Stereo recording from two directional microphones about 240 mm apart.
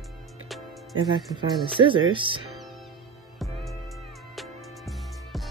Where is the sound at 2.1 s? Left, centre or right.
Right.